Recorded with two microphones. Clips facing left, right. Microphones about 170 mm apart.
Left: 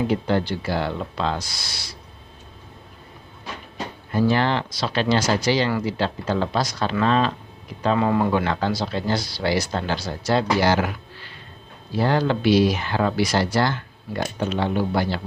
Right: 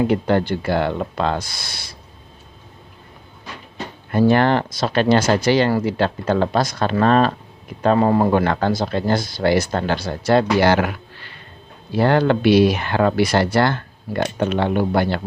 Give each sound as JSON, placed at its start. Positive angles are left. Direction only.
{"t": 0.0, "sound": "speech", "side_deg": -60}
{"t": 4.3, "sound": "speech", "side_deg": -55}
{"t": 7.9, "sound": "speech", "side_deg": -40}